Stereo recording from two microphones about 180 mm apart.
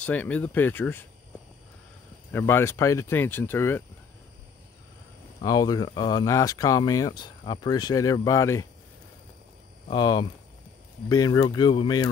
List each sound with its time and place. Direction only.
0.0 s speech: 10° left (ahead or behind)
2.3 s speech: 15° left (ahead or behind)
5.4 s speech: 20° left (ahead or behind)
9.8 s speech: 25° left (ahead or behind)